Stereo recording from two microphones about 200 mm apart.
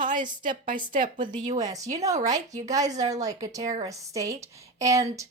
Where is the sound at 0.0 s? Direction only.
40° right (ahead or behind).